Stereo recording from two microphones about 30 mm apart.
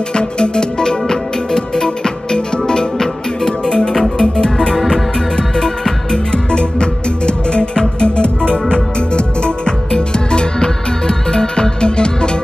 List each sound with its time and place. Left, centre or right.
0.1 s music: left
3.9 s music: centre; by 12.3 s left